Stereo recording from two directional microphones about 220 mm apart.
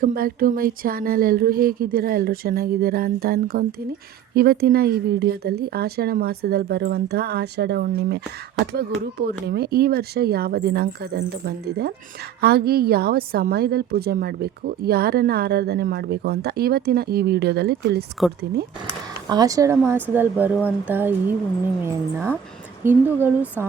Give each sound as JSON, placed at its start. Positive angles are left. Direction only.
{"t": 0.0, "sound": "a woman's voice", "side_deg": -40}
{"t": 19.3, "sound": "speech", "side_deg": -15}